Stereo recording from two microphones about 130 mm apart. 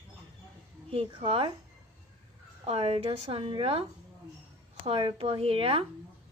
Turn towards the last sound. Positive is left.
turn(degrees=-45)  # may be behind; listen again after turning